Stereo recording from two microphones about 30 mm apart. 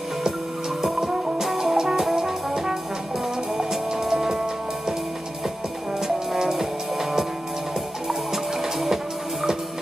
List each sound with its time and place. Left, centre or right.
0.9 s music: centre
2.1 s brass instrument: centre
3.5 s music: centre
5.9 s music: centre